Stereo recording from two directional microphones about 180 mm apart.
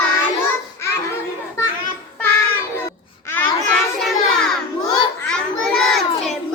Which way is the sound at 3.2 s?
10° left (ahead or behind).